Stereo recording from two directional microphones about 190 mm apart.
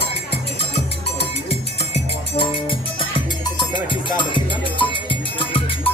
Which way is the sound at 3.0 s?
25° left (ahead or behind).